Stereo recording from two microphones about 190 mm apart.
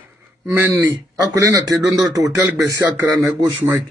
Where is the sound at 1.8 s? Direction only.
Centre (ahead or behind).